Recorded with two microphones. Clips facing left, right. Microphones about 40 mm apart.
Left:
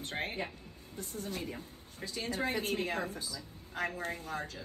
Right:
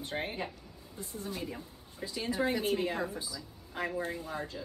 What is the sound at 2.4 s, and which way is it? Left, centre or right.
Speech, left.